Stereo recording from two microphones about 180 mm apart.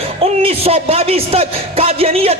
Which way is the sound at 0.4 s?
35° right (ahead or behind).